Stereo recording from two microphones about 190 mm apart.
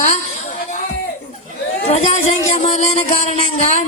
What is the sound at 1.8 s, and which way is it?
Speech, 35° left (ahead or behind).